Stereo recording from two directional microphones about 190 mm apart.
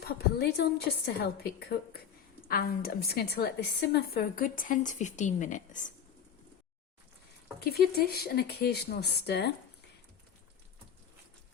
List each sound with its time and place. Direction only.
0.3 s a woman's voice: 60° left (ahead or behind); by 5.9 s 40° left (ahead or behind)
7.6 s speech: 55° left (ahead or behind)